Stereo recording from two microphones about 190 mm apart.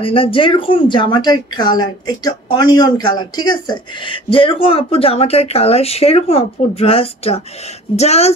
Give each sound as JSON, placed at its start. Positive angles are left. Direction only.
{"t": 0.0, "sound": "speech", "side_deg": 30}